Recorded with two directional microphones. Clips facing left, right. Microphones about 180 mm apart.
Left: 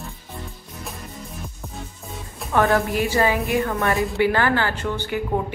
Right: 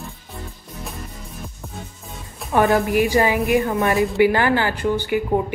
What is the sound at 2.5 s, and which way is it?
A woman's voice, 15° right (ahead or behind).